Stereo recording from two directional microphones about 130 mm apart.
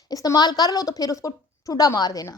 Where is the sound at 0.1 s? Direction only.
25° left (ahead or behind).